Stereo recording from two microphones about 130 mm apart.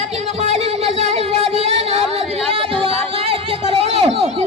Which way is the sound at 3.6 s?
50° right (ahead or behind).